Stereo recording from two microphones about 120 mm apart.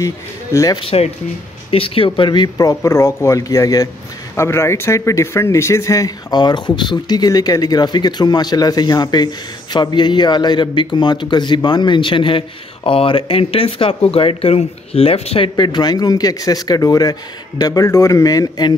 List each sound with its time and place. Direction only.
0.0 s a man's voice: 25° left (ahead or behind)
0.7 s speech: 55° left (ahead or behind)
15.5 s speech: 40° left (ahead or behind)